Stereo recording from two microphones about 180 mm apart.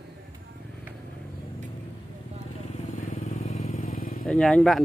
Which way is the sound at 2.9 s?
45° left (ahead or behind).